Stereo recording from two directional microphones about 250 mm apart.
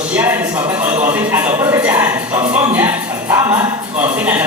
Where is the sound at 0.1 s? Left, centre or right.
Centre.